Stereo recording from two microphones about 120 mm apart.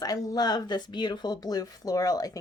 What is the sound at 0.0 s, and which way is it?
Speech, 35° left (ahead or behind).